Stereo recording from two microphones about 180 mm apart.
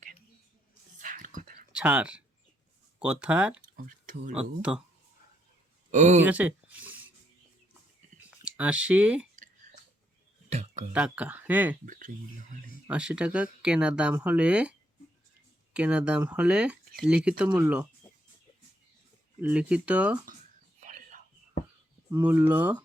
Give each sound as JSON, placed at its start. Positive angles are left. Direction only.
{"t": 0.9, "sound": "whispering", "side_deg": -45}
{"t": 1.7, "sound": "speech", "side_deg": -5}
{"t": 4.0, "sound": "speech", "side_deg": -50}
{"t": 4.4, "sound": "speech", "side_deg": -5}
{"t": 5.9, "sound": "speech", "side_deg": -40}
{"t": 6.2, "sound": "speech", "side_deg": -10}
{"t": 8.3, "sound": "speech", "side_deg": -5}
{"t": 10.5, "sound": "a sound", "side_deg": -40}
{"t": 10.9, "sound": "speech", "side_deg": -5}
{"t": 11.9, "sound": "speech", "side_deg": -45}
{"t": 12.9, "sound": "speech", "side_deg": -5}
{"t": 19.4, "sound": "speech", "side_deg": -5}
{"t": 20.8, "sound": "whispering", "side_deg": -45}
{"t": 22.1, "sound": "speech", "side_deg": -10}